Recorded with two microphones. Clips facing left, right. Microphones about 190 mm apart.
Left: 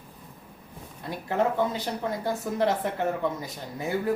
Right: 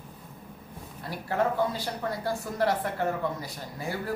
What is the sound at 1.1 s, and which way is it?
Speech, 20° left (ahead or behind).